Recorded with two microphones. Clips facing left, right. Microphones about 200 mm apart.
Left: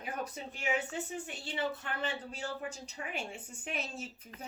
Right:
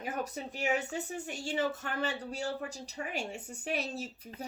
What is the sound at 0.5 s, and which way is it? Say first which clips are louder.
Speech: right 3 dB; 40° right (ahead or behind).